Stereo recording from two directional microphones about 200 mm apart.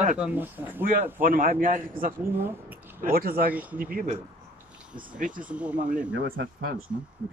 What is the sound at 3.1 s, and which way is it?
Speech, 45° right (ahead or behind).